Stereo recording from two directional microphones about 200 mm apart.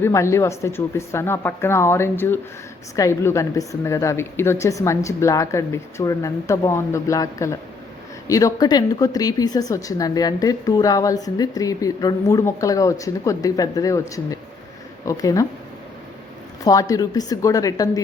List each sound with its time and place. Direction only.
0.0 s a woman's voice: 15° left (ahead or behind)
16.6 s a woman's voice: 15° left (ahead or behind)